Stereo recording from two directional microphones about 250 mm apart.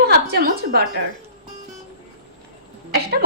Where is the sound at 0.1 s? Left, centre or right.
Right.